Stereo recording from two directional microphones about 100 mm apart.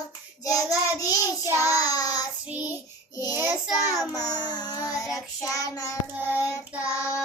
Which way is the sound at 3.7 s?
35° left (ahead or behind).